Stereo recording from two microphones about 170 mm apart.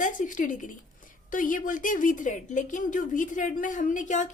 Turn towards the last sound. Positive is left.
turn(degrees=45)  # may be behind; listen again after turning